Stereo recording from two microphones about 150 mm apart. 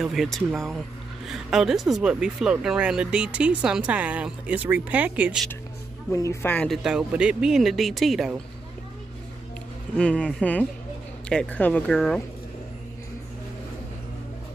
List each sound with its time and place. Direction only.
0.0 s speech: centre (ahead or behind)
6.1 s speech: 20° left (ahead or behind)
6.5 s speech: 10° left (ahead or behind)
6.8 s speech: 5° right (ahead or behind)
9.9 s speech: 5° left (ahead or behind)
11.9 s speech: centre (ahead or behind)